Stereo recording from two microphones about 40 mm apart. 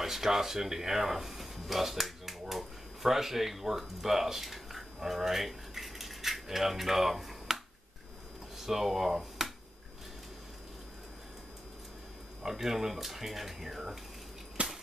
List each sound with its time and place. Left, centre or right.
0.0 s speech: centre
12.4 s speech: centre
14.6 s a sound: right